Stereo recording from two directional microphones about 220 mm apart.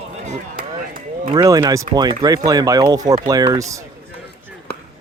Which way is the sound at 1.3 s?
15° right (ahead or behind).